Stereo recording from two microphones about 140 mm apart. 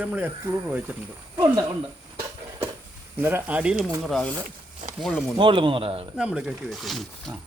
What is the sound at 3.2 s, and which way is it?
Speech, 15° right (ahead or behind).